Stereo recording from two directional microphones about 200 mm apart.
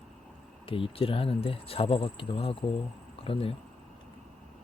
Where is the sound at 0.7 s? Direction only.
25° left (ahead or behind).